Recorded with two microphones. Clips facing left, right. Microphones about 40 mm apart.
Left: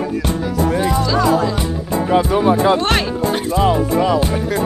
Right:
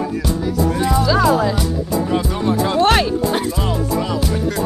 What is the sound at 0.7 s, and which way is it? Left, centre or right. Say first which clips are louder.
Music: left 1 dB; left.